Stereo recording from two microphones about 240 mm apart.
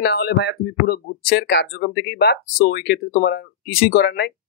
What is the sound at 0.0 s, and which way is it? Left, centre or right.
Speech, left.